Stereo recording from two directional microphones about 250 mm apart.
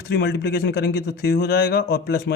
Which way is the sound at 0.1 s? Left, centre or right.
Left.